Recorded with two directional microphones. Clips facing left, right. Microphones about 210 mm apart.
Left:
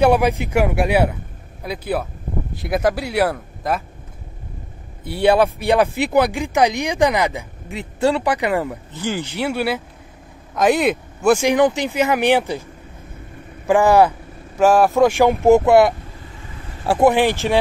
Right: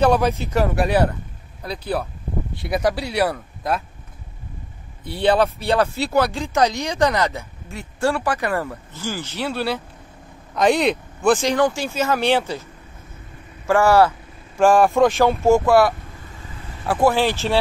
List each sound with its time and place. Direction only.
0.0 s speech: 15° left (ahead or behind)
5.0 s speech: 10° left (ahead or behind)
13.7 s speech: 15° left (ahead or behind)
14.6 s speech: 5° left (ahead or behind)